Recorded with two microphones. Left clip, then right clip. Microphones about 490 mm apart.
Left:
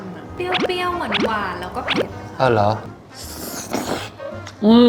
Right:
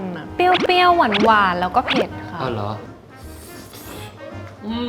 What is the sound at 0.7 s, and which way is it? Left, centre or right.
Speech, right.